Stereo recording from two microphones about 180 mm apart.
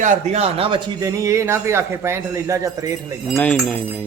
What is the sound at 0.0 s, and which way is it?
Speech, 40° right (ahead or behind).